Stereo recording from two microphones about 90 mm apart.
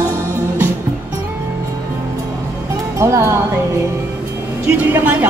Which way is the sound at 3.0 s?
35° right (ahead or behind).